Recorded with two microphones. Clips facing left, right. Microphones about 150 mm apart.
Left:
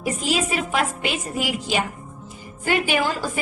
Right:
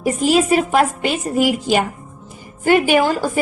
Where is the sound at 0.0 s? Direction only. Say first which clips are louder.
Right 8 dB; 45° right (ahead or behind).